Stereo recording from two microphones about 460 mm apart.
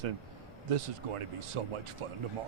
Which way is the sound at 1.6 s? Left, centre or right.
Right.